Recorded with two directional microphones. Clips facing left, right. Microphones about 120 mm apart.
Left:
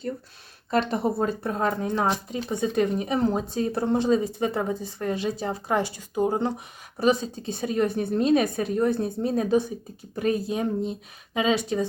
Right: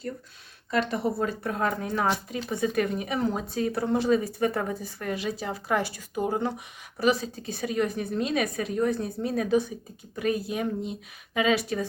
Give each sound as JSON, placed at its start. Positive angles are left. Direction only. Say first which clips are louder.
{"t": 0.7, "sound": "a woman's voice", "louder": "left 3 dB", "side_deg": 30}